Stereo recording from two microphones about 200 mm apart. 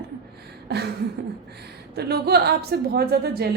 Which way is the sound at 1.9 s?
55° right (ahead or behind).